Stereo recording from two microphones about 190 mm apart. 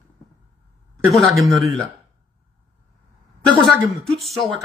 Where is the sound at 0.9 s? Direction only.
Centre (ahead or behind).